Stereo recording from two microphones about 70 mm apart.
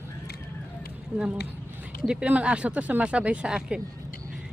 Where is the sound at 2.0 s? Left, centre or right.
Centre.